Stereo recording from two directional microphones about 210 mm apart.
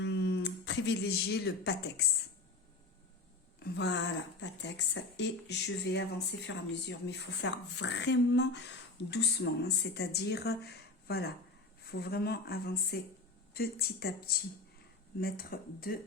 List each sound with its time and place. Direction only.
0.0 s speech: 55° left (ahead or behind)
3.6 s speech: 55° left (ahead or behind)